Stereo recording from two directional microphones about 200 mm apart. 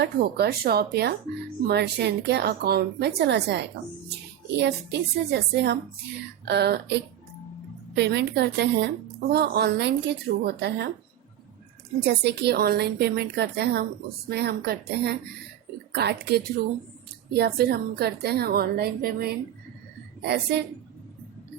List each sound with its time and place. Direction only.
0.0 s a woman's voice: 55° right (ahead or behind)
11.9 s a woman's voice: 55° right (ahead or behind)